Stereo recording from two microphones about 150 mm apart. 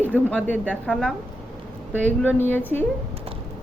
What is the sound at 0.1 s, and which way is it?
A woman's voice, 10° left (ahead or behind).